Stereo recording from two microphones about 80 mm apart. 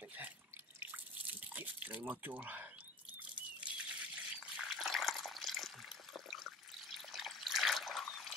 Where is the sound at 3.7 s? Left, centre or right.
Centre.